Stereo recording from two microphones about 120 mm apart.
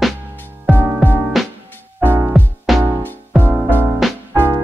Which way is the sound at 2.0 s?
15° right (ahead or behind).